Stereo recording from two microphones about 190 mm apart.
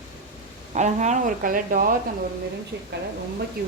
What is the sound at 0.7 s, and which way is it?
A woman's voice, 40° right (ahead or behind).